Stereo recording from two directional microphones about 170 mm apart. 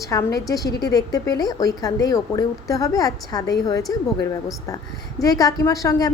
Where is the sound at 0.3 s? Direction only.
20° left (ahead or behind).